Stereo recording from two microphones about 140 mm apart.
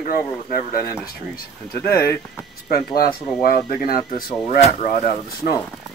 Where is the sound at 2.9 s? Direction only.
90° left.